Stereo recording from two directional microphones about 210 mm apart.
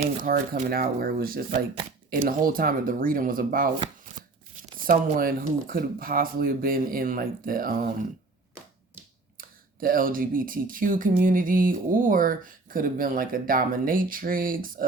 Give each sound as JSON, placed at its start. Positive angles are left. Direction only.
{"t": 0.0, "sound": "speech", "side_deg": -40}
{"t": 4.9, "sound": "speech", "side_deg": -40}
{"t": 9.4, "sound": "speech", "side_deg": -40}